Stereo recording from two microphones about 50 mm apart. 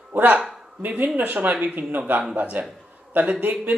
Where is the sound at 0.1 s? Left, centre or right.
Right.